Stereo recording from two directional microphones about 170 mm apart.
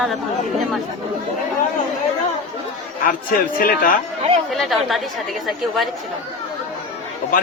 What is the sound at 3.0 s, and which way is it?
Speech, 55° left (ahead or behind).